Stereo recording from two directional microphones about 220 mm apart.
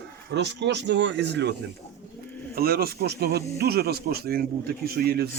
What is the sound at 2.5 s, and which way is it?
Speech, 45° right (ahead or behind).